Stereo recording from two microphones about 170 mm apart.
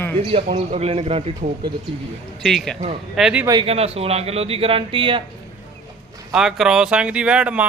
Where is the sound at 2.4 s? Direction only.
Centre (ahead or behind).